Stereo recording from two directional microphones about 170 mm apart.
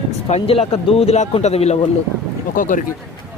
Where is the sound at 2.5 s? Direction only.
50° left (ahead or behind).